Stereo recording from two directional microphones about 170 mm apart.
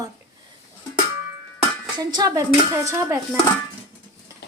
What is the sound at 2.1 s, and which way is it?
A child's voice, 20° right (ahead or behind).